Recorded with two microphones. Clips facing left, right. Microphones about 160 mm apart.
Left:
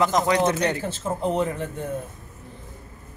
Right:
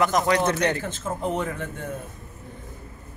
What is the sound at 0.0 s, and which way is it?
Speech, 20° left (ahead or behind).